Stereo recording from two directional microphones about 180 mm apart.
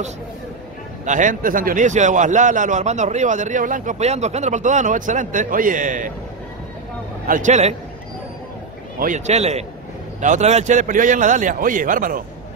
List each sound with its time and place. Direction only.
1.0 s a man's voice: 45° right (ahead or behind)
7.2 s a man's voice: 45° right (ahead or behind)
9.0 s a man's voice: 40° right (ahead or behind)